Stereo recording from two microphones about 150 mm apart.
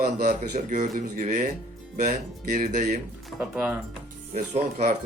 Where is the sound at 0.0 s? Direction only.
60° right (ahead or behind).